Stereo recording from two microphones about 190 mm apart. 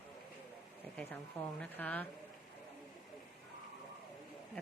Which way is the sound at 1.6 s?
10° left (ahead or behind).